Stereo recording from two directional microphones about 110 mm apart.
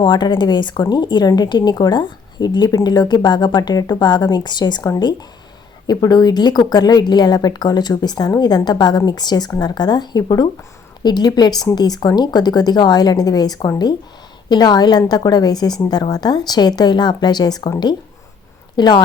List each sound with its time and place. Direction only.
0.0 s a woman's voice: 45° left (ahead or behind)